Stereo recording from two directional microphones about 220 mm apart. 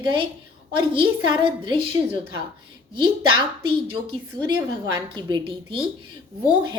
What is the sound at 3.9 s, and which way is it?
A woman's voice, 20° right (ahead or behind).